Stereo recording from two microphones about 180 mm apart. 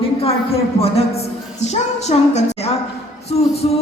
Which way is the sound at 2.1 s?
35° left (ahead or behind).